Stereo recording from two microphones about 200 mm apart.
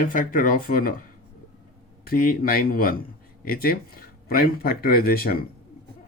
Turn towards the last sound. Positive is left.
turn(degrees=45)  # may be behind; listen again after turning